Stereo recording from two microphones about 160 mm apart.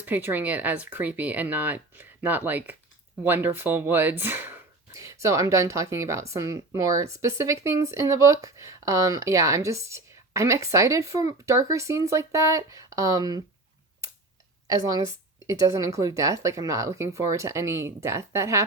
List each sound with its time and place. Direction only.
0.0 s speech: 10° right (ahead or behind)
14.7 s speech: 20° right (ahead or behind)